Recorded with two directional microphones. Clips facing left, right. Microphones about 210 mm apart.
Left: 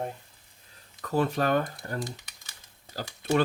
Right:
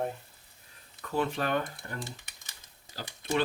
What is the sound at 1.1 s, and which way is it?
Speech, 40° left (ahead or behind).